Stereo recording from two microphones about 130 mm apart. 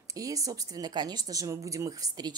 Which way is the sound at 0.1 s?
25° right (ahead or behind).